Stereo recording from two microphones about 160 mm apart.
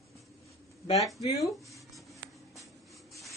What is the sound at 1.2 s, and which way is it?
Speech, 20° left (ahead or behind).